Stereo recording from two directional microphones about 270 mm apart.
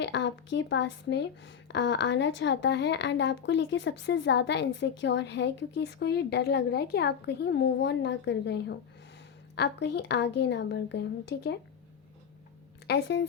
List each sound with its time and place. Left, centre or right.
0.0 s speech: left
12.9 s speech: left